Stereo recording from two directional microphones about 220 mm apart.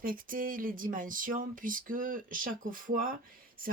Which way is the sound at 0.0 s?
40° right (ahead or behind).